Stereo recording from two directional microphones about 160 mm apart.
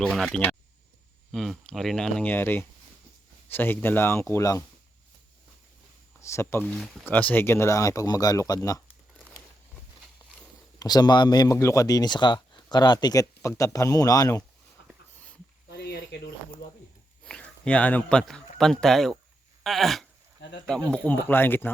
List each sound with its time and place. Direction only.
0.0 s speech: centre (ahead or behind); by 4.6 s 15° left (ahead or behind)
6.1 s speech: 15° left (ahead or behind)
10.8 s speech: 25° left (ahead or behind)
14.8 s a sound: 90° left
17.2 s a man's voice: 5° left (ahead or behind)
19.6 s a sound: centre (ahead or behind)
20.7 s speech: 5° left (ahead or behind)